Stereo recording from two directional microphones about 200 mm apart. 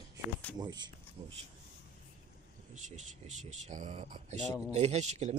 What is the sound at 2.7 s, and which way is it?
Speech, 35° right (ahead or behind).